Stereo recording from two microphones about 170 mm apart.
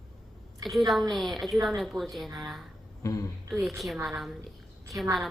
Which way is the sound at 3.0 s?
20° left (ahead or behind).